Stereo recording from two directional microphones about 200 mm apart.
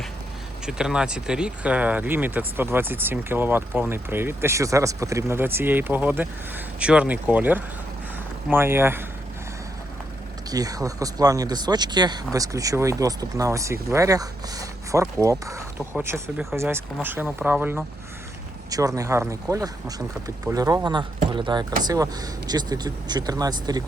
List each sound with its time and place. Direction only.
0.6 s speech: 5° right (ahead or behind)
10.5 s speech: 20° right (ahead or behind)
18.9 s speech: 15° right (ahead or behind)